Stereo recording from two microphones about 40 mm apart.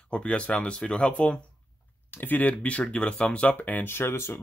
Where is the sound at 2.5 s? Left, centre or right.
Left.